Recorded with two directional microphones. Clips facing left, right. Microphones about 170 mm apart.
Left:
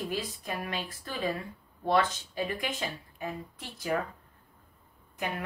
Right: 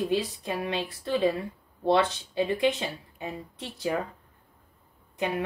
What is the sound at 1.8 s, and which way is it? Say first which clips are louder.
Speech: right 3 dB; 25° right (ahead or behind).